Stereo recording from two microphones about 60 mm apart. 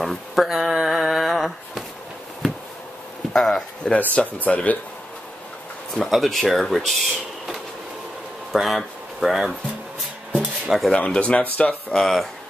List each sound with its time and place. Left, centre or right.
0.0 s a sound: centre
3.3 s a sound: centre
4.4 s speech: left
5.9 s speech: centre
10.3 s dishes: centre
11.0 s speech: left
12.0 s stir: centre